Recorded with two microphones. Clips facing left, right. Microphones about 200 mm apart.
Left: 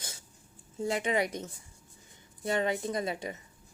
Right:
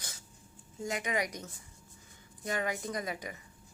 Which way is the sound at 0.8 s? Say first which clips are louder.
Left 5 dB; 30° left (ahead or behind).